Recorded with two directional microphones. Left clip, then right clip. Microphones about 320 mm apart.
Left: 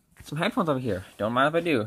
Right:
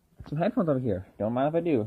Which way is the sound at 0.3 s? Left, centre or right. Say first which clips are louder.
Left 1 dB; centre.